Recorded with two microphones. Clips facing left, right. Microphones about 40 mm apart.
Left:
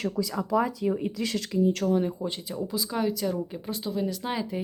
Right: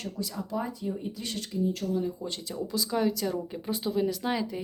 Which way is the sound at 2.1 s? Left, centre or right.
Centre.